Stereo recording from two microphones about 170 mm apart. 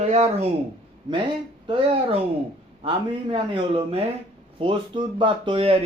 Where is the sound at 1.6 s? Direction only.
30° right (ahead or behind).